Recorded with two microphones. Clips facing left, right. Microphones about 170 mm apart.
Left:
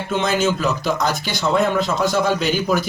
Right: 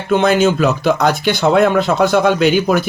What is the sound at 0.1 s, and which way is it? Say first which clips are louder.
Speech: right 7 dB; 60° right (ahead or behind).